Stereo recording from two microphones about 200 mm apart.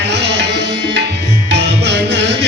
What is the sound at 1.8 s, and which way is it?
Music, 60° right (ahead or behind).